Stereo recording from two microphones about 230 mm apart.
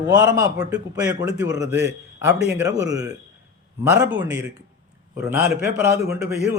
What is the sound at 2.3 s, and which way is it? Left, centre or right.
Speech, right.